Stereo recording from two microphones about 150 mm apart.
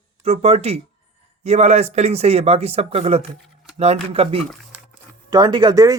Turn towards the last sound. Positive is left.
turn(degrees=-25)  # may be behind; listen again after turning